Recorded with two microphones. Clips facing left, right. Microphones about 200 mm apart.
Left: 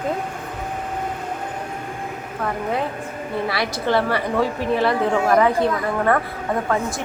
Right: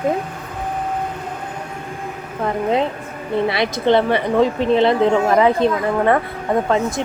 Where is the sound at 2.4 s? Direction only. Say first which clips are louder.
Right 5 dB; 20° right (ahead or behind).